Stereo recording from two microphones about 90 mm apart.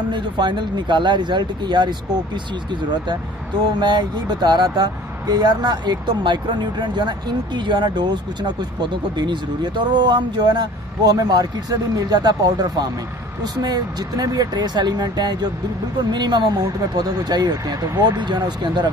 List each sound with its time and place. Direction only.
0.1 s speech: 60° right (ahead or behind)